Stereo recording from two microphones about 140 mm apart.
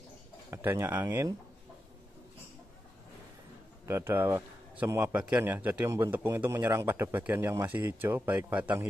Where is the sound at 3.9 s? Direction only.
15° right (ahead or behind).